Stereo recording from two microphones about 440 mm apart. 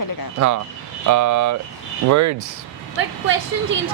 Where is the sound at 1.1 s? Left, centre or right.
Right.